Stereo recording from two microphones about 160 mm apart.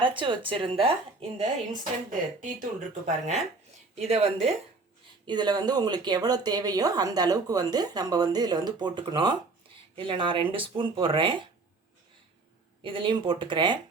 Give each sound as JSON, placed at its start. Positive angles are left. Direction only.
{"t": 0.0, "sound": "speech", "side_deg": -30}
{"t": 2.0, "sound": "speech", "side_deg": -55}
{"t": 3.9, "sound": "speech", "side_deg": -40}
{"t": 5.2, "sound": "speech", "side_deg": -25}
{"t": 12.8, "sound": "speech", "side_deg": -30}